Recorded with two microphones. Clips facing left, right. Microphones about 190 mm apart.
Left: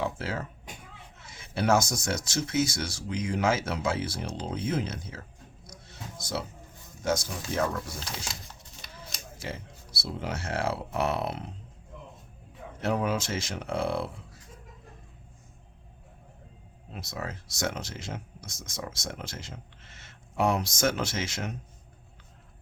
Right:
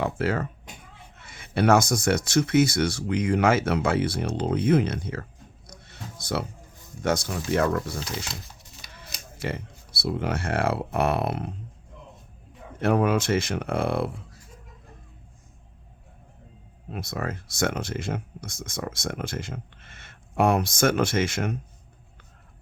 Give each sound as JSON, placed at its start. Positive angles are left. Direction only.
{"t": 0.0, "sound": "cat", "side_deg": -60}
{"t": 1.2, "sound": "speech", "side_deg": -60}
{"t": 5.8, "sound": "a sound", "side_deg": -60}
{"t": 7.0, "sound": "speech", "side_deg": -65}
{"t": 9.4, "sound": "speech", "side_deg": -60}
{"t": 12.8, "sound": "speech", "side_deg": -60}
{"t": 16.9, "sound": "speech", "side_deg": -55}